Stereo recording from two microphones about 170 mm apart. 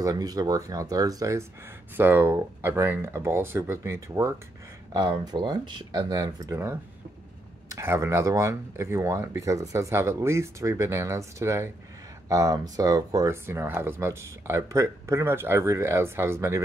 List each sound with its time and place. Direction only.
0.0 s speech: 20° right (ahead or behind)